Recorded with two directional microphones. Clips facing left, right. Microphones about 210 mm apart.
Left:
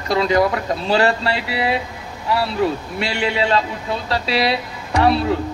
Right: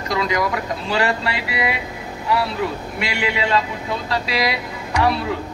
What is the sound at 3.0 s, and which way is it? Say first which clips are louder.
A man's voice: left 2 dB; 30° left (ahead or behind).